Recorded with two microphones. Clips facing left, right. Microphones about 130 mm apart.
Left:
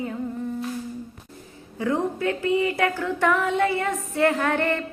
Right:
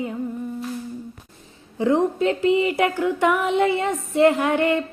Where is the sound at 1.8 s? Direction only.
20° right (ahead or behind).